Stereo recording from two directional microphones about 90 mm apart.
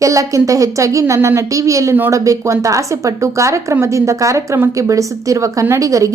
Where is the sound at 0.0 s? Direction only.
35° right (ahead or behind).